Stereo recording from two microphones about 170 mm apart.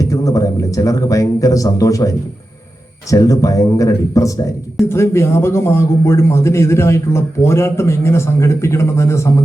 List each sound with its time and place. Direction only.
0.0 s a man's voice: 20° left (ahead or behind)